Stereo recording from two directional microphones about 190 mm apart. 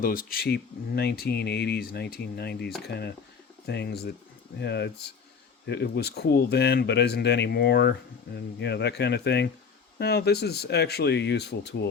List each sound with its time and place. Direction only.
0.0 s speech: 45° left (ahead or behind)